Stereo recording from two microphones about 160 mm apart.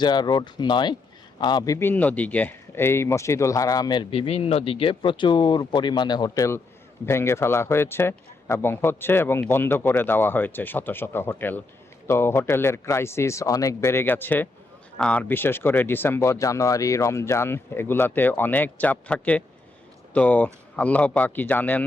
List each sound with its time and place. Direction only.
0.0 s a man's voice: 25° left (ahead or behind); by 21.8 s 10° left (ahead or behind)